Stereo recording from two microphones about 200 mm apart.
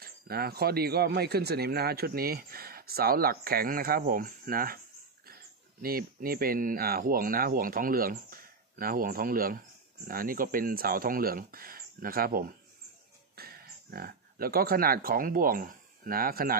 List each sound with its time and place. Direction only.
0.0 s speech: 50° right (ahead or behind)